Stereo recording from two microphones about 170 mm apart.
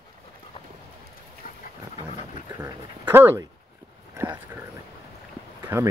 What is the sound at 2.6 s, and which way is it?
Speech, 15° right (ahead or behind).